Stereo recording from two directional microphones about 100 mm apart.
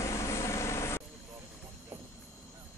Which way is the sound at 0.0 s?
30° left (ahead or behind).